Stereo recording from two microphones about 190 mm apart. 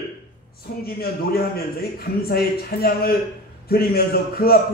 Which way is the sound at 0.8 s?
55° left (ahead or behind).